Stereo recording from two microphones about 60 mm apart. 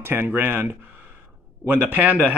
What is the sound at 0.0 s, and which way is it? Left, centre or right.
Speech, right.